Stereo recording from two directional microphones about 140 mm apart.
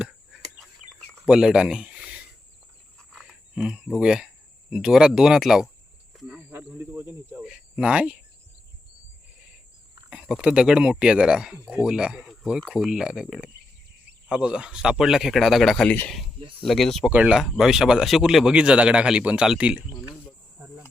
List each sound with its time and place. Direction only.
1.2 s a sound: 5° right (ahead or behind)
3.1 s cricket: centre (ahead or behind)
4.7 s a man's voice: 5° right (ahead or behind)
10.1 s a man's voice: 5° right (ahead or behind)
16.4 s a sound: 40° right (ahead or behind)
16.6 s a man's voice: centre (ahead or behind)
17.1 s a man's voice: 10° right (ahead or behind)